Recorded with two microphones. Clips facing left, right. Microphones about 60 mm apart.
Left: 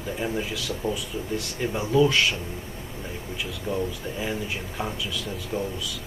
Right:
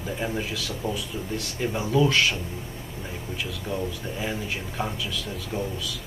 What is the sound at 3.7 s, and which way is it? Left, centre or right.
Speech, centre.